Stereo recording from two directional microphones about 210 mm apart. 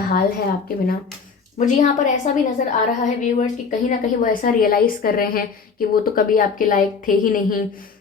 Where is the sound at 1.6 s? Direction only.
35° left (ahead or behind).